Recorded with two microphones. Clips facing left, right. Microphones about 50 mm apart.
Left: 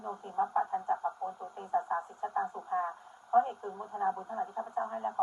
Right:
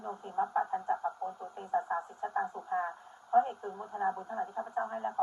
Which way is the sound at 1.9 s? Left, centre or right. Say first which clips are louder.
Left 1 dB; centre.